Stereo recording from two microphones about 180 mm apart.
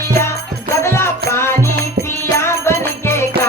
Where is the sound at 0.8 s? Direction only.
15° left (ahead or behind).